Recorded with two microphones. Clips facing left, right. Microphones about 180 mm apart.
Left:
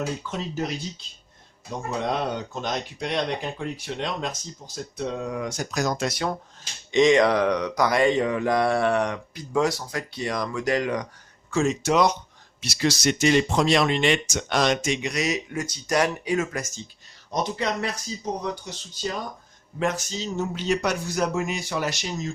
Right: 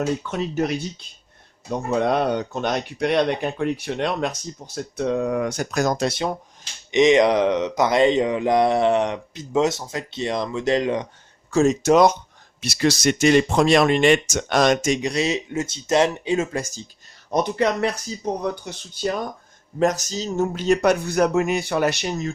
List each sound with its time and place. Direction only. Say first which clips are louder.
0.3 s speech: right 6 dB; 65° right (ahead or behind)
2.0 s speech: right 6 dB; 60° right (ahead or behind)
6.0 s speech: right 3 dB; 25° right (ahead or behind)
11.5 s speech: right 5 dB; 40° right (ahead or behind)
15.1 s speech: right 4 dB; 30° right (ahead or behind)
17.3 s speech: right 6 dB; 55° right (ahead or behind)
19.8 s speech: right 5 dB; 40° right (ahead or behind); by 22.3 s 60° right (ahead or behind)